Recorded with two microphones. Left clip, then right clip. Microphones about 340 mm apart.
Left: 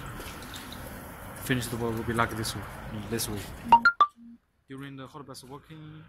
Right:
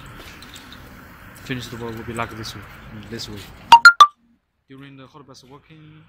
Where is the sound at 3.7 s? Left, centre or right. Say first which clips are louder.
Right 12 dB; right.